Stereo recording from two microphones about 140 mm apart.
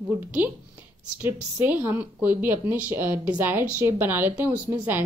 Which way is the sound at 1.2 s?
15° right (ahead or behind).